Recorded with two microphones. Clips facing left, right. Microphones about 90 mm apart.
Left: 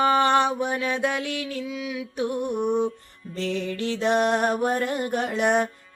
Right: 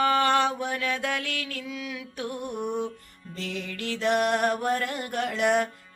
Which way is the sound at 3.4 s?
35° left (ahead or behind).